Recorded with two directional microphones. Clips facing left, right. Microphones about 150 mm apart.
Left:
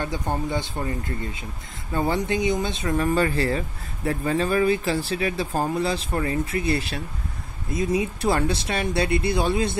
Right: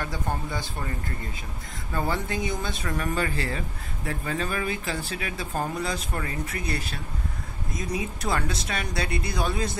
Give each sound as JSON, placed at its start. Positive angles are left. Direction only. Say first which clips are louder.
{"t": 0.0, "sound": "speech", "louder": "left 4 dB", "side_deg": 20}
{"t": 3.2, "sound": "speech", "louder": "left 6 dB", "side_deg": 35}